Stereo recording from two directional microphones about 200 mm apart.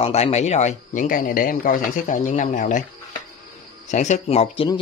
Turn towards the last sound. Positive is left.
turn(degrees=30)  # may be behind; listen again after turning